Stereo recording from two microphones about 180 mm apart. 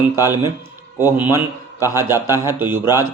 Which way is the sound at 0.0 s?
15° right (ahead or behind).